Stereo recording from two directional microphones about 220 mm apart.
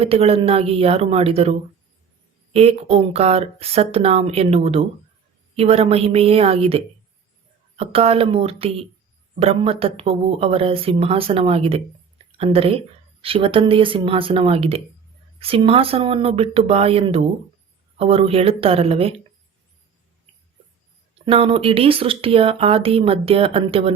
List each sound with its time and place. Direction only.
0.0 s speech: 25° right (ahead or behind)
21.2 s speech: 25° right (ahead or behind)